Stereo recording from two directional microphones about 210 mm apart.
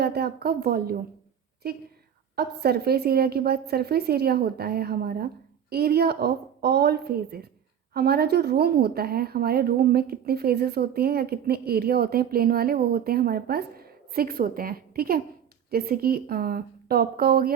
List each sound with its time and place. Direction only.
0.0 s a woman's voice: 50° right (ahead or behind)
2.3 s a woman's voice: 50° right (ahead or behind)